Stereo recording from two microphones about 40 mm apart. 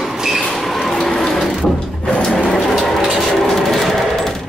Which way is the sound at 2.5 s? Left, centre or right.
Centre.